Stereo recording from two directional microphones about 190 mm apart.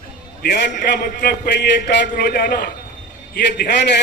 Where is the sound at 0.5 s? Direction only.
60° left (ahead or behind).